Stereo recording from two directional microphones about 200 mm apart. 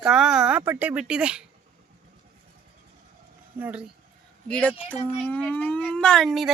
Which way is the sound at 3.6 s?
5° right (ahead or behind).